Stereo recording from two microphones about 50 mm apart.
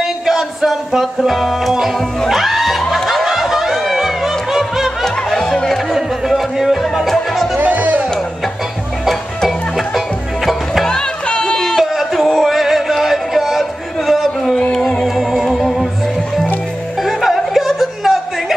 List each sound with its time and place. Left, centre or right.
0.0 s music: centre
5.0 s music: centre
5.9 s music: centre
7.5 s music: right
9.4 s music: centre
10.9 s a sound: centre
11.8 s music: centre
17.0 s a sound: centre